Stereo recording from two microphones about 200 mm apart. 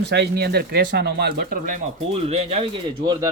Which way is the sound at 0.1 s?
55° right (ahead or behind).